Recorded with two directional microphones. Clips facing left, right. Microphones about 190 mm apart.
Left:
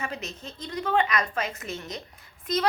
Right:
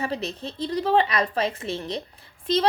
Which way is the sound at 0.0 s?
35° right (ahead or behind).